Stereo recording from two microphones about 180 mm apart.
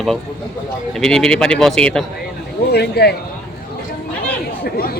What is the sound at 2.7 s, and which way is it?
Speech, 65° left (ahead or behind).